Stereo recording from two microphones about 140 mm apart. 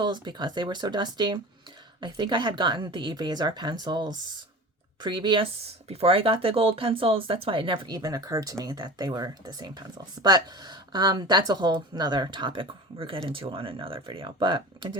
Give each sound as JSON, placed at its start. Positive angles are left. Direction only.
{"t": 0.0, "sound": "speech", "side_deg": -30}